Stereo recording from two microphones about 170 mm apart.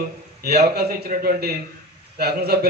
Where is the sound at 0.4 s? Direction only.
70° right (ahead or behind).